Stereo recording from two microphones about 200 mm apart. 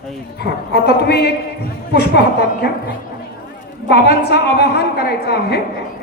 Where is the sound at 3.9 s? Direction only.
55° left (ahead or behind).